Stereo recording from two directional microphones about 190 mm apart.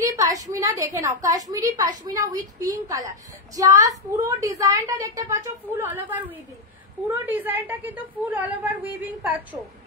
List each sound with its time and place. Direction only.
0.0 s a woman's voice: 15° right (ahead or behind)